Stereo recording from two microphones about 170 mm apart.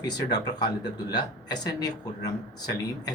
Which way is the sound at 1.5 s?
25° left (ahead or behind).